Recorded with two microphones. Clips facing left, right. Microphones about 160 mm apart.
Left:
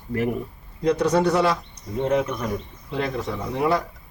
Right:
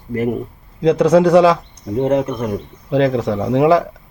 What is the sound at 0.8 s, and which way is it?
Speech, 90° right.